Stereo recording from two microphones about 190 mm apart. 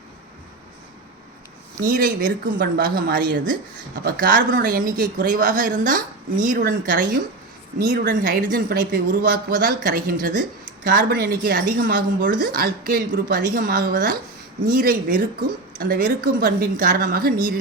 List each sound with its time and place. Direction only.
1.8 s speech: 50° right (ahead or behind)
7.8 s speech: 55° right (ahead or behind)